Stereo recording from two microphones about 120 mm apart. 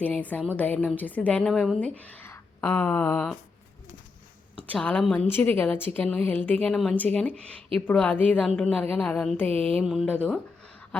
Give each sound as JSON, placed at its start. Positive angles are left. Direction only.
{"t": 0.0, "sound": "a woman's voice", "side_deg": 15}
{"t": 4.7, "sound": "a woman's voice", "side_deg": 10}
{"t": 9.5, "sound": "music", "side_deg": -55}
{"t": 9.8, "sound": "a woman's voice", "side_deg": 0}